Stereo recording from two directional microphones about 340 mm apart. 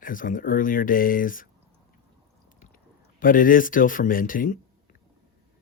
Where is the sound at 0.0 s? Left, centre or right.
Left.